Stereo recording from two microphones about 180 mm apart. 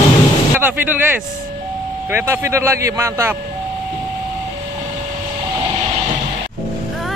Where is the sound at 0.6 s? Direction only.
10° right (ahead or behind).